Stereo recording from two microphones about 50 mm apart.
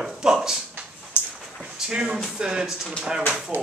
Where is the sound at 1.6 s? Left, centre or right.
Centre.